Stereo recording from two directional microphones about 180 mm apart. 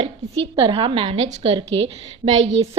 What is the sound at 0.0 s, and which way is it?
A woman's voice, 30° right (ahead or behind).